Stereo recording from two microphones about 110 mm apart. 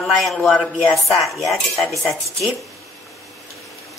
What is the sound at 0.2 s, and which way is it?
A woman's voice, centre (ahead or behind).